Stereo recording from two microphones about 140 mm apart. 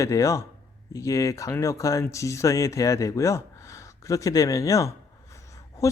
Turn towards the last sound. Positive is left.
turn(degrees=25)  # may be behind; listen again after turning